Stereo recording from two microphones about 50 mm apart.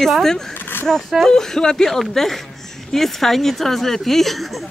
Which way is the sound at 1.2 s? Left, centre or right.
Centre.